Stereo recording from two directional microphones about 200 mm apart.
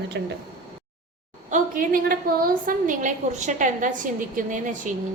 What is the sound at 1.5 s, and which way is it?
A woman's voice, 45° right (ahead or behind).